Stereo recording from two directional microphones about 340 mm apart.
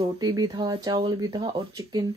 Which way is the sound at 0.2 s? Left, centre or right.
Centre.